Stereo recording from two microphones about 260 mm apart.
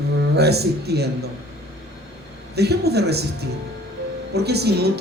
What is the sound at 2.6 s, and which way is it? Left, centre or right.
Speech, right.